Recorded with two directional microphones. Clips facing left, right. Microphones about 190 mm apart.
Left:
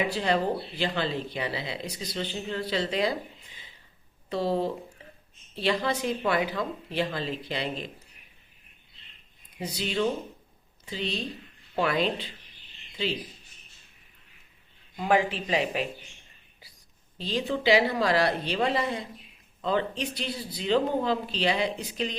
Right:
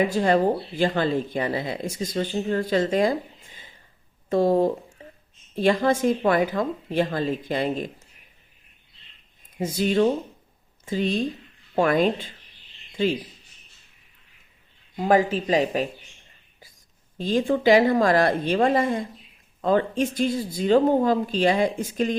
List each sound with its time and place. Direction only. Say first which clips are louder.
0.0 s speech: right 6 dB; 45° right (ahead or behind)
9.6 s speech: right 8 dB; 45° right (ahead or behind)
14.9 s speech: right 5 dB; 40° right (ahead or behind)
17.2 s speech: right 7 dB; 50° right (ahead or behind)